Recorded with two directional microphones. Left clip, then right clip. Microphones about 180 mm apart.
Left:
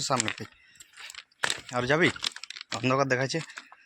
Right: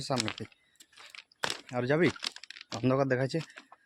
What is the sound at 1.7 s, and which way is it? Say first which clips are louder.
Speech: left 3 dB; 10° right (ahead or behind).